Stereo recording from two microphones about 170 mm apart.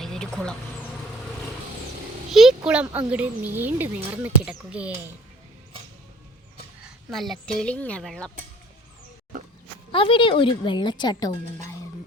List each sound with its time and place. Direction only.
0.0 s bee: 5° left (ahead or behind)
2.3 s a sound: centre (ahead or behind)
3.1 s speech: 10° right (ahead or behind)
6.8 s a woman's voice: centre (ahead or behind)
9.9 s a woman's voice: 30° left (ahead or behind)